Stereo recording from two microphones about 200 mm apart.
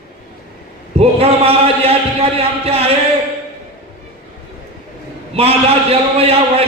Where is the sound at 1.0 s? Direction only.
30° right (ahead or behind).